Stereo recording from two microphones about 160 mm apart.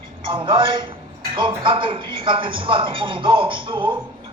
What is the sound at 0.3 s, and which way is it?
Speech, 30° right (ahead or behind).